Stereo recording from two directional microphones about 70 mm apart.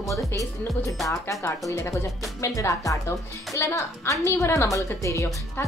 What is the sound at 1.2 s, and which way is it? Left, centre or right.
A woman's voice, left.